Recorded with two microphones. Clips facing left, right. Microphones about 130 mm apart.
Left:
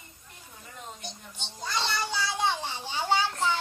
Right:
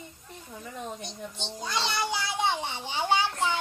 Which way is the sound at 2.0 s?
15° right (ahead or behind).